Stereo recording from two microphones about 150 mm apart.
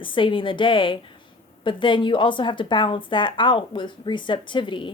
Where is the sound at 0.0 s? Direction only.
35° left (ahead or behind).